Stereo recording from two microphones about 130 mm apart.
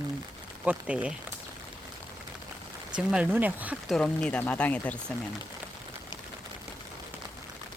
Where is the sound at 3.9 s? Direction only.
5° left (ahead or behind).